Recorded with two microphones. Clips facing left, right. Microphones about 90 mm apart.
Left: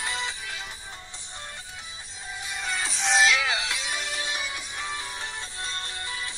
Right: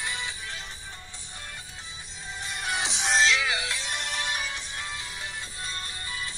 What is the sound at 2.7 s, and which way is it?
Music, 20° right (ahead or behind).